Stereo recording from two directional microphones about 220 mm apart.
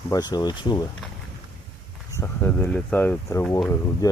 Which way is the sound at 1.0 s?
Centre (ahead or behind).